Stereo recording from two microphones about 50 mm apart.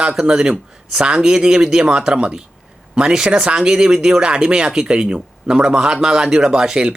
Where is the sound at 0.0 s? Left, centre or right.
Centre.